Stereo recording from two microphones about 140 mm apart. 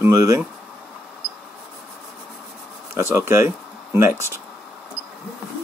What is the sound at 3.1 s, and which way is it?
Speech, 15° right (ahead or behind).